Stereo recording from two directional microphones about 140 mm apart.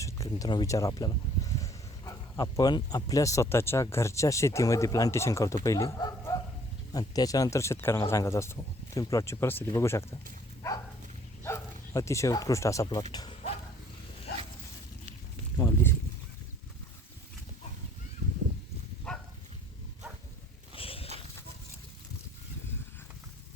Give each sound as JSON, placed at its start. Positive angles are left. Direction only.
{"t": 0.0, "sound": "speech", "side_deg": 25}
{"t": 11.4, "sound": "speech", "side_deg": 20}
{"t": 15.5, "sound": "a sound", "side_deg": 15}
{"t": 19.1, "sound": "dog", "side_deg": 5}
{"t": 20.7, "sound": "walk", "side_deg": 40}